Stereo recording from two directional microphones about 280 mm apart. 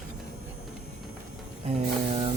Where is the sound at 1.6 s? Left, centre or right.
Right.